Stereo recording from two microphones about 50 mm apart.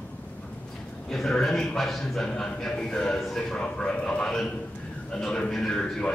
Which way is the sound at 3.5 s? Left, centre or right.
Centre.